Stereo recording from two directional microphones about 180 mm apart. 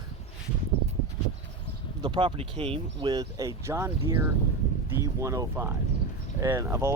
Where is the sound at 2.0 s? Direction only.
30° right (ahead or behind).